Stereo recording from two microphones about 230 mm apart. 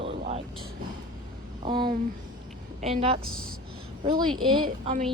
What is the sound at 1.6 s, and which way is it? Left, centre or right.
Speech, right.